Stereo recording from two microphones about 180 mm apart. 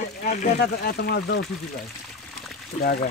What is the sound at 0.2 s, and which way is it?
Speech, 45° left (ahead or behind).